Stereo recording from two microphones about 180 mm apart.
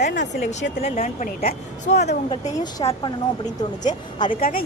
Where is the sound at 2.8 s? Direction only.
30° left (ahead or behind).